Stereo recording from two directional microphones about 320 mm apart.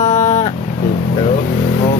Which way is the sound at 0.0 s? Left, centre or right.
Left.